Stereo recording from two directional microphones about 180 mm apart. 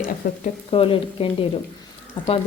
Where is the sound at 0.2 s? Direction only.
55° left (ahead or behind).